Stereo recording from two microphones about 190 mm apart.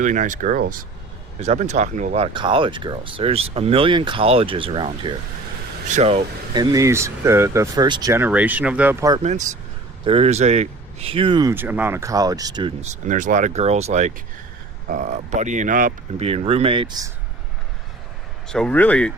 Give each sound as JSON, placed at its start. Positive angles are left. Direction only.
{"t": 0.0, "sound": "speech", "side_deg": -40}
{"t": 10.0, "sound": "speech", "side_deg": -30}
{"t": 11.5, "sound": "speech", "side_deg": -10}
{"t": 12.8, "sound": "speech", "side_deg": -40}
{"t": 16.1, "sound": "speech", "side_deg": -30}
{"t": 18.4, "sound": "speech", "side_deg": 5}